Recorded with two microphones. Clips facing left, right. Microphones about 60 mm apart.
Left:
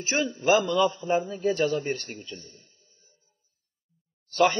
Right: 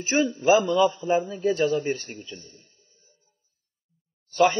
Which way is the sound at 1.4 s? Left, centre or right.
Centre.